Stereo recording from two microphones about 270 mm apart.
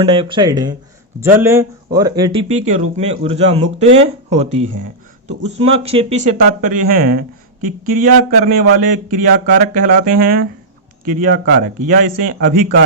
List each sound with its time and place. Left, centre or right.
0.0 s a man's voice: centre